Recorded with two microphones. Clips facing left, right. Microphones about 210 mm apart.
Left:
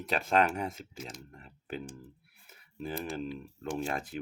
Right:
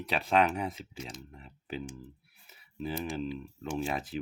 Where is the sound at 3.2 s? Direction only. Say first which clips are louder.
Right 2 dB; 5° right (ahead or behind).